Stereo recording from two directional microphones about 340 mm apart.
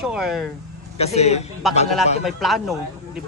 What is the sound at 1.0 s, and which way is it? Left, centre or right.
Speech, centre.